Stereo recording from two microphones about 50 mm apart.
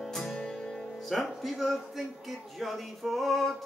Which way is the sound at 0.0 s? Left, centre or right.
Centre.